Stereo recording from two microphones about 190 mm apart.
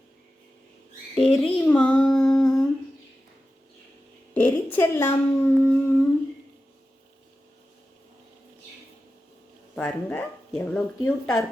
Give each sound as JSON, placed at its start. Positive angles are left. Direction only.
{"t": 1.2, "sound": "child singing", "side_deg": 0}
{"t": 2.1, "sound": "humming", "side_deg": 5}
{"t": 4.4, "sound": "a woman's voice", "side_deg": 10}
{"t": 9.7, "sound": "speech", "side_deg": 5}